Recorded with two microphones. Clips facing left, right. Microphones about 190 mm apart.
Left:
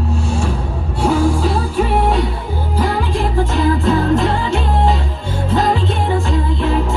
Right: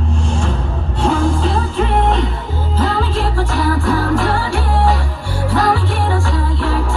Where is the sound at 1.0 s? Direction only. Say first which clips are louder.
Left 1 dB; 10° left (ahead or behind).